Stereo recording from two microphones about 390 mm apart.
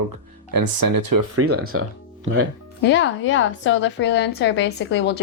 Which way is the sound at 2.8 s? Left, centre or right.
Left.